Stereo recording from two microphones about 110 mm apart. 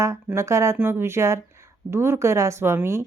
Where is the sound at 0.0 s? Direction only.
25° right (ahead or behind).